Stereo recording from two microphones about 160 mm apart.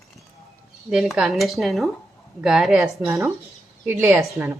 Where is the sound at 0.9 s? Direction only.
Centre (ahead or behind).